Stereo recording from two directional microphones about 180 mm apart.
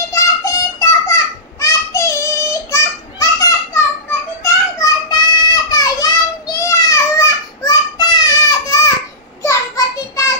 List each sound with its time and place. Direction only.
0.0 s a sound: 15° left (ahead or behind)
4.4 s children playing: 20° left (ahead or behind)
5.5 s child singing: 20° left (ahead or behind)